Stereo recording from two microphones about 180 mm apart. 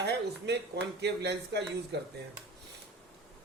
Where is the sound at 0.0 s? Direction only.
65° right (ahead or behind).